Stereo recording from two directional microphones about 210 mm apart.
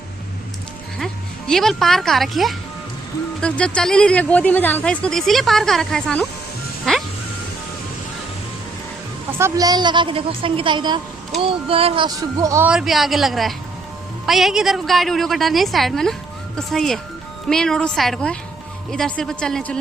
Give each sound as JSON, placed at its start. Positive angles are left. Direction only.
{"t": 0.9, "sound": "speech", "side_deg": 0}
{"t": 9.4, "sound": "a woman's voice", "side_deg": -15}